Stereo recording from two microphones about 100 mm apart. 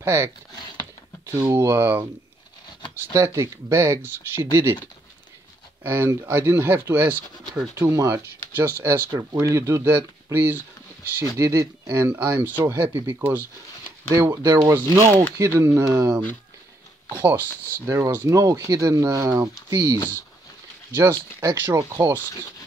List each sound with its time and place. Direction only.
0.0 s speech: 30° right (ahead or behind)
3.1 s speech: 30° right (ahead or behind)
5.9 s speech: 25° right (ahead or behind)
7.9 s speech: 35° right (ahead or behind)
8.5 s speech: 20° right (ahead or behind)
9.1 s speech: 35° right (ahead or behind)
14.1 s speech: 30° right (ahead or behind)
17.8 s speech: 30° right (ahead or behind)